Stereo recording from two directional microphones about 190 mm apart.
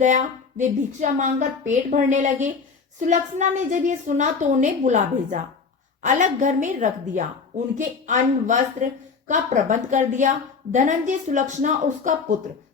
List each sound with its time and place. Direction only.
0.0 s a woman's voice: 40° right (ahead or behind)